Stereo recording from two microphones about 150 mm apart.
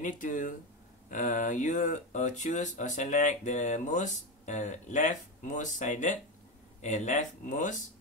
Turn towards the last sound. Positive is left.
turn(degrees=55)  # may be behind; listen again after turning